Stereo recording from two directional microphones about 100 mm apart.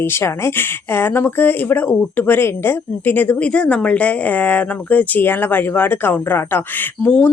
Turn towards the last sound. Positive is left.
turn(degrees=15)  # may be behind; listen again after turning